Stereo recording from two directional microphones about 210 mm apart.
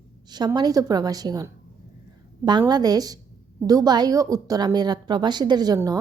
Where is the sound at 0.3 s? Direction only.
20° right (ahead or behind).